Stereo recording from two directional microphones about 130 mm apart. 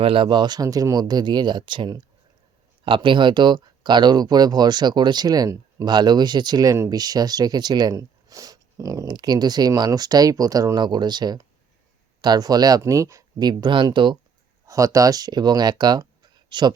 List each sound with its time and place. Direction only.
0.0 s speech: 40° right (ahead or behind)
14.7 s speech: 25° right (ahead or behind)